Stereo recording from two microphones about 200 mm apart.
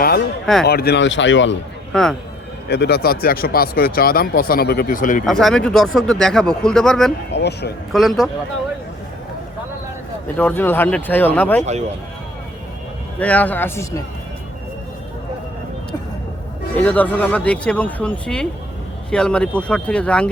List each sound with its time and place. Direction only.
0.6 s speech: 50° left (ahead or behind)
1.9 s speech: 5° left (ahead or behind)
2.6 s speech: 55° left (ahead or behind)
5.2 s speech: centre (ahead or behind)
7.3 s speech: 55° left (ahead or behind)
7.9 s speech: centre (ahead or behind)
10.3 s speech: 10° left (ahead or behind)
13.1 s speech: 5° left (ahead or behind)
16.7 s speech: 5° left (ahead or behind)